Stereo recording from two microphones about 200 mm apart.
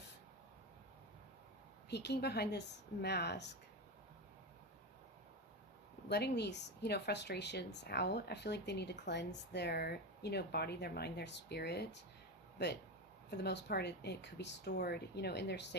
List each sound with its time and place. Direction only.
1.9 s speech: 55° left (ahead or behind)
6.1 s speech: 55° left (ahead or behind)